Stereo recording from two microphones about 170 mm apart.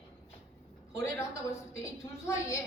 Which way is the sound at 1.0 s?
15° left (ahead or behind).